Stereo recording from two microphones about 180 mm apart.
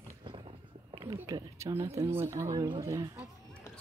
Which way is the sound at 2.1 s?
15° right (ahead or behind).